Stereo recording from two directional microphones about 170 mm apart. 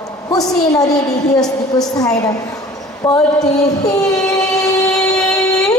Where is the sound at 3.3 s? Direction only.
20° left (ahead or behind).